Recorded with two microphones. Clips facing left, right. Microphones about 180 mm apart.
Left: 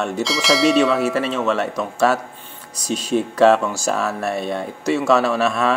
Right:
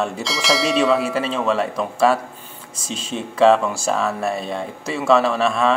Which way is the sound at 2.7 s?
25° right (ahead or behind).